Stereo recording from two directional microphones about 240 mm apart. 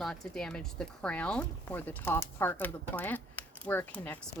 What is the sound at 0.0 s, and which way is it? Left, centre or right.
Speech, centre.